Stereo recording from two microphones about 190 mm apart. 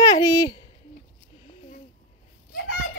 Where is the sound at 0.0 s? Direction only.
20° left (ahead or behind).